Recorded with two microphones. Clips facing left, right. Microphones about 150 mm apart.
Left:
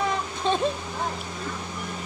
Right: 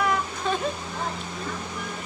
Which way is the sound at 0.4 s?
25° left (ahead or behind).